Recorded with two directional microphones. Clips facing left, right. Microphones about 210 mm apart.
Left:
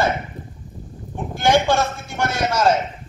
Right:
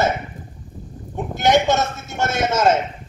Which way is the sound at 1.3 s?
20° right (ahead or behind).